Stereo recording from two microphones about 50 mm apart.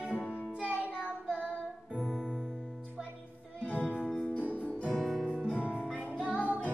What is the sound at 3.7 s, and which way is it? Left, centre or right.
Music, left.